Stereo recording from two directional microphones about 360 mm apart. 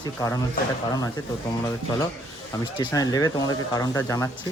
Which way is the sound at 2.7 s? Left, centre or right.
Centre.